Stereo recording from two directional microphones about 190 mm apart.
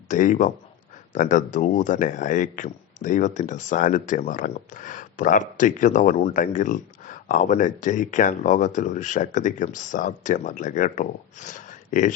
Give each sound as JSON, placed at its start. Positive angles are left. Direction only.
{"t": 0.1, "sound": "speech", "side_deg": 40}